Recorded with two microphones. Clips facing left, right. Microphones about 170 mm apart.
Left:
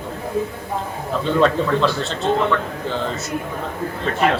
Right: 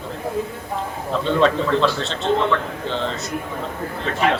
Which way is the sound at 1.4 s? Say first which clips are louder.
Left 1 dB; 5° left (ahead or behind).